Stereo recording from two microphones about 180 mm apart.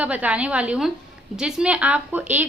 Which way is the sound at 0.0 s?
10° right (ahead or behind).